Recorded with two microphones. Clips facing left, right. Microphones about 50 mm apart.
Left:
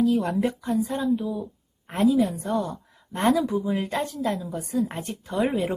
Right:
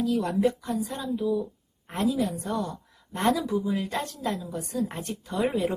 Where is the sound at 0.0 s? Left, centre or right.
Centre.